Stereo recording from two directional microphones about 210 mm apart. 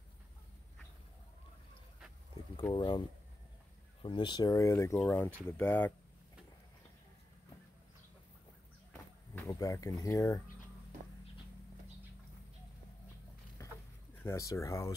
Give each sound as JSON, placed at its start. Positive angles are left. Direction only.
{"t": 2.5, "sound": "speech", "side_deg": 20}
{"t": 9.3, "sound": "speech", "side_deg": 15}
{"t": 13.6, "sound": "a sound", "side_deg": 15}
{"t": 14.2, "sound": "speech", "side_deg": 15}